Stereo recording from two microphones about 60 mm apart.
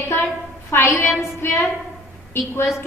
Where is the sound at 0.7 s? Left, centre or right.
Left.